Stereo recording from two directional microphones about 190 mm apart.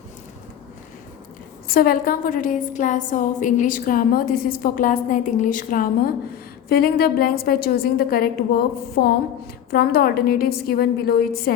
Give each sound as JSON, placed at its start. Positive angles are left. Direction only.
{"t": 1.6, "sound": "a woman's voice", "side_deg": 50}